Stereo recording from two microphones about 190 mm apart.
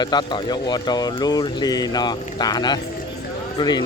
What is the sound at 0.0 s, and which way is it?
Speech, 25° left (ahead or behind).